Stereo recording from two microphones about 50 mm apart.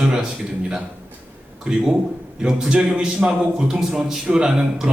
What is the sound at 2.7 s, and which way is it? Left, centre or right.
A man's voice, centre.